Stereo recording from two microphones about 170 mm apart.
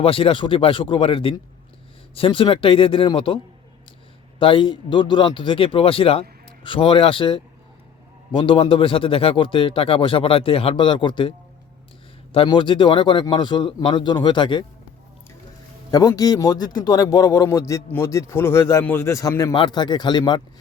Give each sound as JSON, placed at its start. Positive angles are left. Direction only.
{"t": 0.0, "sound": "a man's voice", "side_deg": 30}
{"t": 15.9, "sound": "a man's voice", "side_deg": 20}